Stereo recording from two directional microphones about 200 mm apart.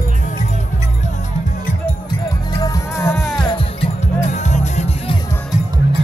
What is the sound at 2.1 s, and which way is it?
Music, 20° left (ahead or behind).